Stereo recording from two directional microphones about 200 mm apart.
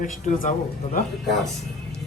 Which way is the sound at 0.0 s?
40° left (ahead or behind).